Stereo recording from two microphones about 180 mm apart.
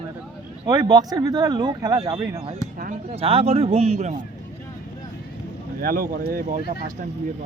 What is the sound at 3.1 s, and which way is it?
Speech, 30° right (ahead or behind).